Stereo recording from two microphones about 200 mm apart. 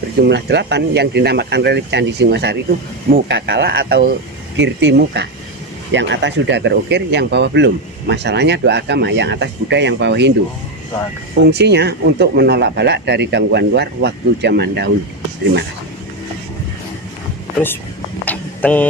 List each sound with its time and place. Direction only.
0.3 s speech: 60° right (ahead or behind)
4.5 s speech: 60° right (ahead or behind)
11.5 s speech: 60° right (ahead or behind)
18.3 s a sound: 10° left (ahead or behind)